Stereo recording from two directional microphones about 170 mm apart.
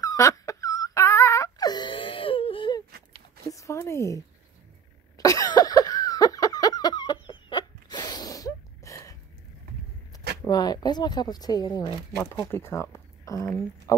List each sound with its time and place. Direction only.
0.0 s wail: 20° left (ahead or behind)
3.4 s speech: 20° left (ahead or behind)
5.1 s a sound: 20° left (ahead or behind)
10.4 s speech: 20° left (ahead or behind)